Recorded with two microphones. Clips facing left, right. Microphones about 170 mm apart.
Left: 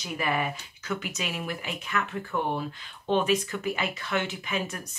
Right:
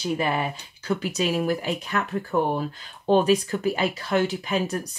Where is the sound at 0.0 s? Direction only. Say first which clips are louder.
Right 4 dB; 30° right (ahead or behind).